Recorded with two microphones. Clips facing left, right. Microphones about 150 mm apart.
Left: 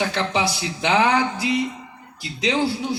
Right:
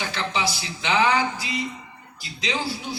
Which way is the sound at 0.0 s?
55° left (ahead or behind).